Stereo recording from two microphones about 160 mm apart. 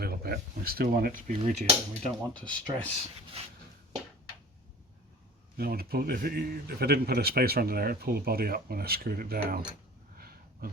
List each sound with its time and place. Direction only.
0.0 s a man's voice: 70° right (ahead or behind); by 2.0 s 45° right (ahead or behind)
2.0 s speech: 5° left (ahead or behind)
5.5 s a man's voice: 70° right (ahead or behind)
10.2 s a sound: 70° right (ahead or behind)